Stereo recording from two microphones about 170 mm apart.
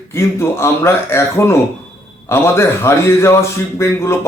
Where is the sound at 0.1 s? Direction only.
15° left (ahead or behind).